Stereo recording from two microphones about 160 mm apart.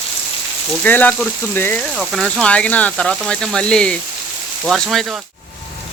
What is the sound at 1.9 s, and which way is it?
Speech, centre (ahead or behind).